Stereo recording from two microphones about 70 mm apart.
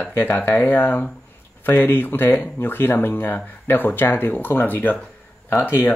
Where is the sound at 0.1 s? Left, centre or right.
Left.